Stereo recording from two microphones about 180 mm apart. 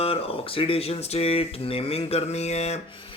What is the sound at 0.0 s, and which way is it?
Speech, 35° left (ahead or behind).